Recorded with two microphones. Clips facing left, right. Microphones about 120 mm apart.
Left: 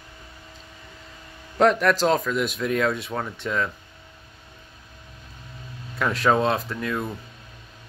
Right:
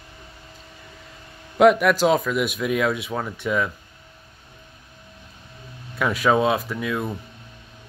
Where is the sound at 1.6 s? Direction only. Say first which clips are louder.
Right 3 dB; 10° right (ahead or behind).